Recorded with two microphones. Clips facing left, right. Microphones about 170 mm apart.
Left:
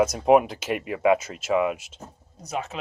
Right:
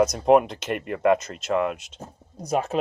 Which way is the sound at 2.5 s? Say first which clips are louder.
Right 7 dB; 45° right (ahead or behind).